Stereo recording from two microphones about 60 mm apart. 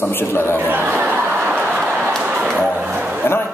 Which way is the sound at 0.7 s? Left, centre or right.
Right.